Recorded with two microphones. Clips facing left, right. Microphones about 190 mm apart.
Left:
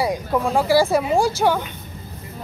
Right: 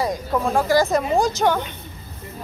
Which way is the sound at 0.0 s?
10° left (ahead or behind).